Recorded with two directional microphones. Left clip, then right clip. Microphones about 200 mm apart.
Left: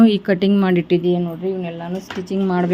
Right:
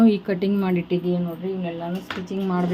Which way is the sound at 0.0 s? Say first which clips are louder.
Left 5 dB; 40° left (ahead or behind).